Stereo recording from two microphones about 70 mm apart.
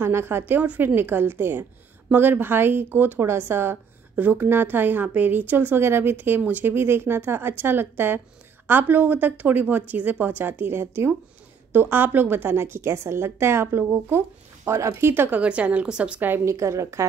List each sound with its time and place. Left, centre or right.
0.0 s speech: right
0.6 s a woman's voice: right
15.3 s speech: centre
16.4 s a woman's voice: right